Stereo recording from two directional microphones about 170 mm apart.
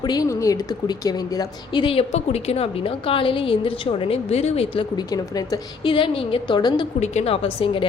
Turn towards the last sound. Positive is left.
turn(degrees=30)  # may be behind; listen again after turning